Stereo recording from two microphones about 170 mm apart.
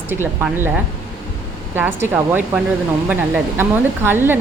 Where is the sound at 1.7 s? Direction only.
10° right (ahead or behind).